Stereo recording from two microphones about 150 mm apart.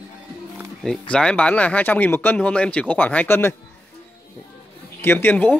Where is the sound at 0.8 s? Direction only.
5° left (ahead or behind).